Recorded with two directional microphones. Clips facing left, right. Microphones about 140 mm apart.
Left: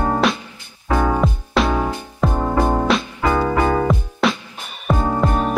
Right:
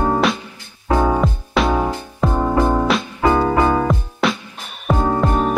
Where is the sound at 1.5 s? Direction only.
Centre (ahead or behind).